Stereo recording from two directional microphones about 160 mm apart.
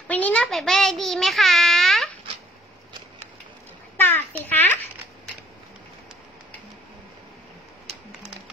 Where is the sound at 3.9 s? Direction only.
10° left (ahead or behind).